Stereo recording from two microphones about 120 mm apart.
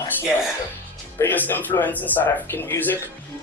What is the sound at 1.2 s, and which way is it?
Speech, 15° left (ahead or behind).